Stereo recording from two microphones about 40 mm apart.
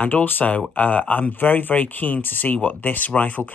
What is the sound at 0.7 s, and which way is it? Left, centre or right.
Speech, left.